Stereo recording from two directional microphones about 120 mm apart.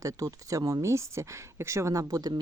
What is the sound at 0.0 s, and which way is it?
Speech, 30° right (ahead or behind).